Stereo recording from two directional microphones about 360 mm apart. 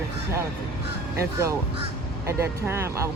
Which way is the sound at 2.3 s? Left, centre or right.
Centre.